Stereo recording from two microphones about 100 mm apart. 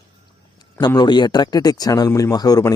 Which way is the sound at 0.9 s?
45° left (ahead or behind).